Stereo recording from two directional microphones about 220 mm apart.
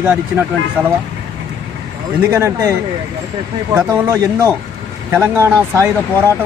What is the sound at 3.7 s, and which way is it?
Speech, 15° right (ahead or behind).